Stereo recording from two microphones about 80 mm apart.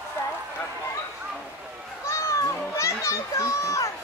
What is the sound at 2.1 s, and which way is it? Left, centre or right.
Children playing, left.